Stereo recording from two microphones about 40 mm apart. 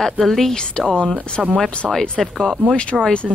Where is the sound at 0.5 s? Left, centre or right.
Left.